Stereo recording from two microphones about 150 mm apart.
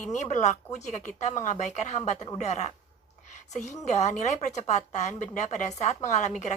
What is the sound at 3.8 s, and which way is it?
Speech, 50° left (ahead or behind).